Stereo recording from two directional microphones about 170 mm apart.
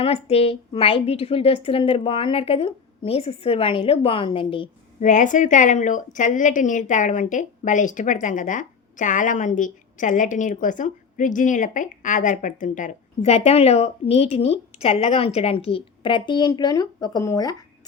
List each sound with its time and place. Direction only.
0.0 s a woman's voice: 35° left (ahead or behind)
4.9 s a woman's voice: 45° left (ahead or behind); by 17.6 s 20° left (ahead or behind)